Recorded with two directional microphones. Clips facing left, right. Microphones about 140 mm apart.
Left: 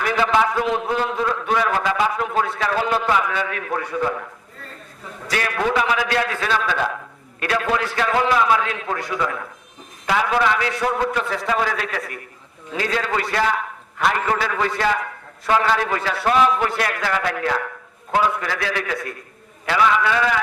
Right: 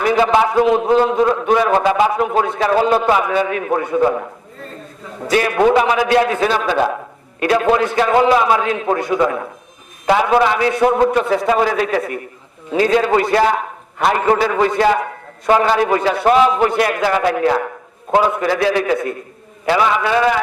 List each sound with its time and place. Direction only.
0.0 s a man's voice: 25° right (ahead or behind)
5.3 s a man's voice: 25° right (ahead or behind)